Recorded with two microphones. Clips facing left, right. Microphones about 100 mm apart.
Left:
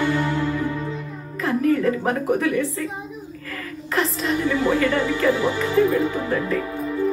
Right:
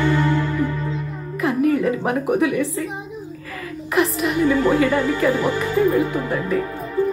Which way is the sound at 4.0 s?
15° right (ahead or behind).